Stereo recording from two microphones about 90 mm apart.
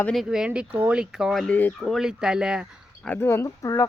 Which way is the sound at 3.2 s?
30° left (ahead or behind).